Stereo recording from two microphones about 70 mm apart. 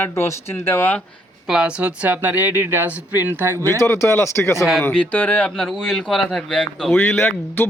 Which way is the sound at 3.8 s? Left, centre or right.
Left.